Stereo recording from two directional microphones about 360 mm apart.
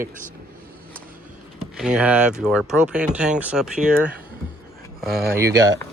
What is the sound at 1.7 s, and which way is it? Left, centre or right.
Speech, centre.